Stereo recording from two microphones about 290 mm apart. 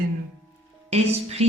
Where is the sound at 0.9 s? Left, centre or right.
Right.